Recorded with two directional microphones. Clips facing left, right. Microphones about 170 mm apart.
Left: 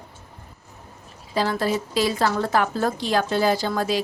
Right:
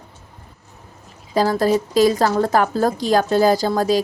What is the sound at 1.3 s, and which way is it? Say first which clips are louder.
A woman's voice: right 6 dB; 40° right (ahead or behind).